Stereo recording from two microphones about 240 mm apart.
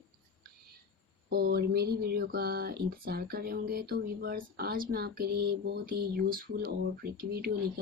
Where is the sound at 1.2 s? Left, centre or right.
Right.